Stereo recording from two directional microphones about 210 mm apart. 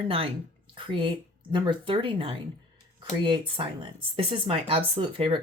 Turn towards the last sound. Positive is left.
turn(degrees=-25)  # may be behind; listen again after turning